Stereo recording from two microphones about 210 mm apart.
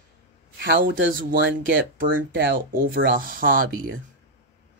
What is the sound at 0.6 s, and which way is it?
Speech, 45° right (ahead or behind).